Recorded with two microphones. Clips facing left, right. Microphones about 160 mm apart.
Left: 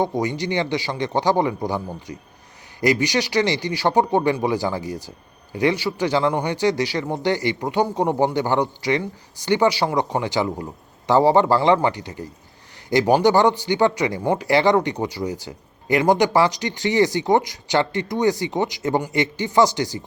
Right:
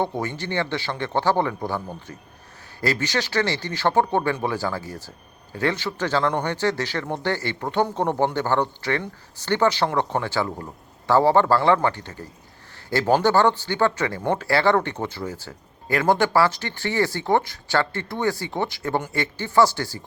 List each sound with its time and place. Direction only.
0.0 s speech: 15° left (ahead or behind)